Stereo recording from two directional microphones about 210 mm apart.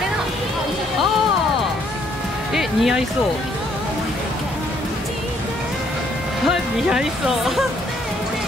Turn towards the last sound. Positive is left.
turn(degrees=0)  # may be behind; listen again after turning